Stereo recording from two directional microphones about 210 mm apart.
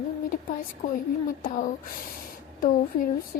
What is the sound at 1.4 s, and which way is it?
Speech, 40° left (ahead or behind).